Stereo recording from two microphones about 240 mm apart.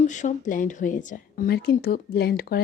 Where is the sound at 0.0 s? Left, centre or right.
Left.